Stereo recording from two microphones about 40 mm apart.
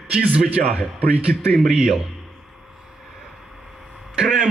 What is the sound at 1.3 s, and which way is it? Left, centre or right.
Speech, centre.